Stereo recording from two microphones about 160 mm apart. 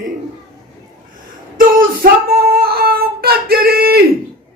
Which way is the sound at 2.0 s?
65° right (ahead or behind).